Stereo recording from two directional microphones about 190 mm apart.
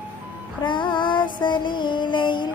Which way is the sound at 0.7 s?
25° left (ahead or behind).